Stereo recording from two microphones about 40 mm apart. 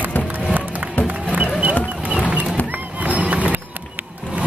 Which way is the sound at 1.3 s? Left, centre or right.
Right.